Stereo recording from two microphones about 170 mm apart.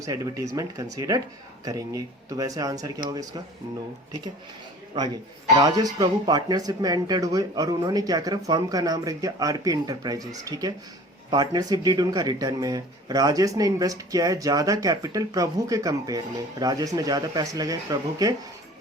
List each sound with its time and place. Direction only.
0.0 s speech: 20° right (ahead or behind)
4.9 s speech: 25° right (ahead or behind)